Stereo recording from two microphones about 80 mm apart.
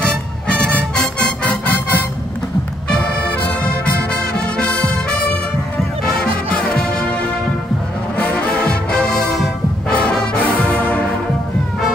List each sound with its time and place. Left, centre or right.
0.0 s music: centre
2.9 s brass instrument: centre
6.2 s brass instrument: centre
8.2 s brass instrument: centre